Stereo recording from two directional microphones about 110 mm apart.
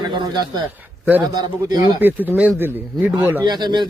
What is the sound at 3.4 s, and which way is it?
Speech, 40° right (ahead or behind).